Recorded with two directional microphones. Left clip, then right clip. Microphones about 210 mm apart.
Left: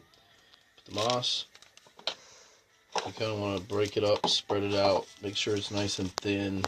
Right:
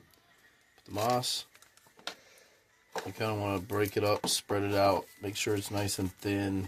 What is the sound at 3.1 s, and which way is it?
Speech, 50° right (ahead or behind).